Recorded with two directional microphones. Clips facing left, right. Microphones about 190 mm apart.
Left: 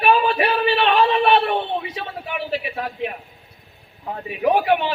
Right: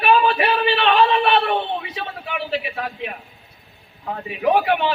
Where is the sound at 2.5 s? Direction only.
40° left (ahead or behind).